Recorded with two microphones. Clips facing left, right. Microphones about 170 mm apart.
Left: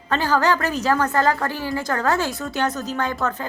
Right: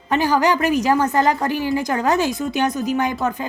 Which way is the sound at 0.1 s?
15° right (ahead or behind).